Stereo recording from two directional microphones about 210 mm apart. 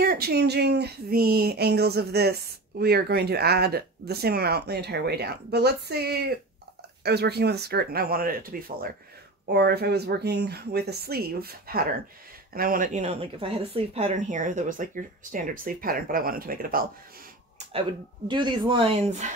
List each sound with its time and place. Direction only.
0.0 s speech: 45° right (ahead or behind)
18.3 s speech: 25° right (ahead or behind)